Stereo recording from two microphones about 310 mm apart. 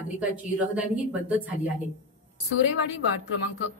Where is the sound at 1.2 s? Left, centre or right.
Centre.